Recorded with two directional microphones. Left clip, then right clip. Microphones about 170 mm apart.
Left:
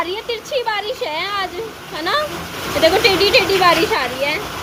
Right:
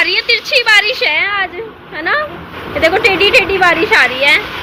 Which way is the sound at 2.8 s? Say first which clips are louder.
Right 3 dB; 15° left (ahead or behind).